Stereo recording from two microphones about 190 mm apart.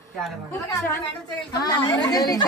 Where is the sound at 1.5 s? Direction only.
20° left (ahead or behind).